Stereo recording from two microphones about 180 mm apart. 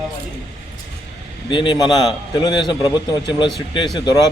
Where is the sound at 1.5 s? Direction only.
25° left (ahead or behind).